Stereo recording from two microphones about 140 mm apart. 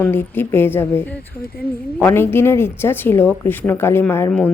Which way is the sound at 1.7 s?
15° left (ahead or behind).